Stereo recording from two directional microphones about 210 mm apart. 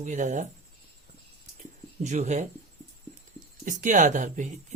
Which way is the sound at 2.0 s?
35° right (ahead or behind).